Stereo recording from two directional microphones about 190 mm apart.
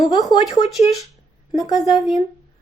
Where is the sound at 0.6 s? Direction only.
35° left (ahead or behind).